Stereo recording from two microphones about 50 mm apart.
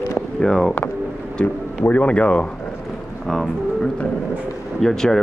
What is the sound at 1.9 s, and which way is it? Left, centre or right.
Speech, left.